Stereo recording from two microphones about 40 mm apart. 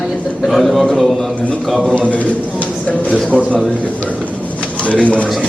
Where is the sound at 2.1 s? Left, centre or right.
Left.